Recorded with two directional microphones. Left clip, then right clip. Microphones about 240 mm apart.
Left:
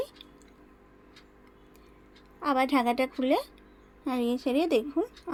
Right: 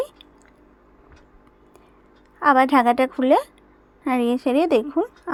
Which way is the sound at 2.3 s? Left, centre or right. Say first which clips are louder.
Right 10 dB; centre.